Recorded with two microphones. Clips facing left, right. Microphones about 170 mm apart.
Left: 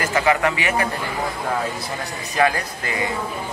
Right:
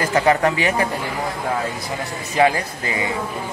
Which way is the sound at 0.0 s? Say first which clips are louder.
Right 2 dB; 35° right (ahead or behind).